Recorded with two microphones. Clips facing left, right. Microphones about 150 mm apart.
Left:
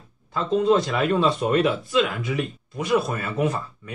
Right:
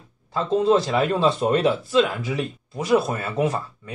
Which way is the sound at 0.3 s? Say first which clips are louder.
Right 1 dB; 30° right (ahead or behind).